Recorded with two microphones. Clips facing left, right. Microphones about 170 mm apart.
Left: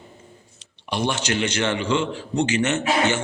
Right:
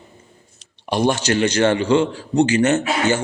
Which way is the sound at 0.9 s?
40° right (ahead or behind).